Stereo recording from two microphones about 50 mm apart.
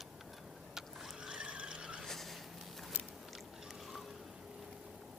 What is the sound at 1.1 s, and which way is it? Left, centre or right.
Squeal, centre.